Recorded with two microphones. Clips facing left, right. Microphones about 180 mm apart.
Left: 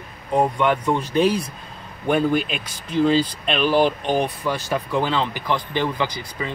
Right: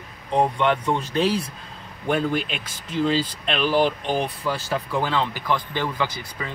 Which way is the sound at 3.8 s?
15° left (ahead or behind).